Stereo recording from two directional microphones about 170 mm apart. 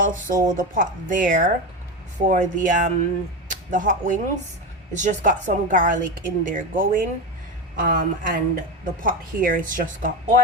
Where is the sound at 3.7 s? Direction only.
50° right (ahead or behind).